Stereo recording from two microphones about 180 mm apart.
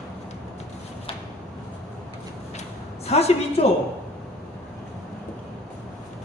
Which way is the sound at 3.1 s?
35° left (ahead or behind).